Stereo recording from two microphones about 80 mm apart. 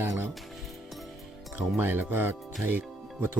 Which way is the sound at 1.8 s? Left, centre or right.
Right.